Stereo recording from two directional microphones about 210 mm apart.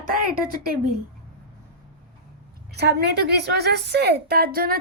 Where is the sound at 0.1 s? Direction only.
45° right (ahead or behind).